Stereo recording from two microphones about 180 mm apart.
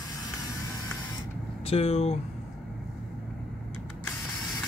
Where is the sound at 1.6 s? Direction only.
35° left (ahead or behind).